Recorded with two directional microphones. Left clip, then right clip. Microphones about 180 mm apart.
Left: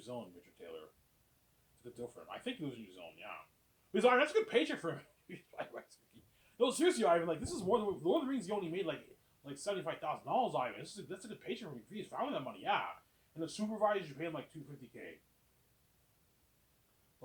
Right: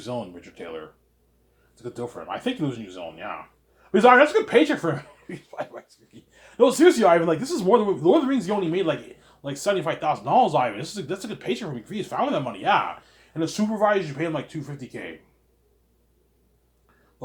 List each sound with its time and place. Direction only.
1.8 s speech: 30° right (ahead or behind)